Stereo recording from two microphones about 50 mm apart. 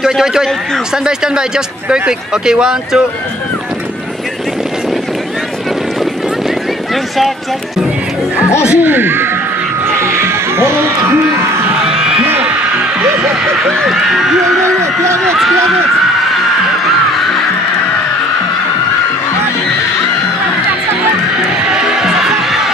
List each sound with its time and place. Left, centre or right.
0.0 s speech: centre
8.4 s speech: left
8.7 s speech: right
9.8 s music: right
11.8 s a sound: centre
13.8 s a man's voice: centre
21.6 s music: centre